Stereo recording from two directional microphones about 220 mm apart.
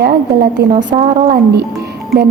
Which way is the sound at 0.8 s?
35° right (ahead or behind).